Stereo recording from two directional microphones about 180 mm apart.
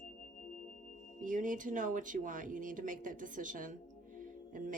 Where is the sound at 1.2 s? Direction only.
50° right (ahead or behind).